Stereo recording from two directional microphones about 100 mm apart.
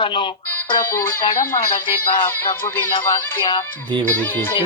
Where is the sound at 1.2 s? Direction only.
50° left (ahead or behind).